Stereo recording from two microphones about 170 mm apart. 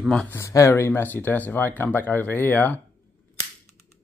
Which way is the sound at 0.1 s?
5° left (ahead or behind).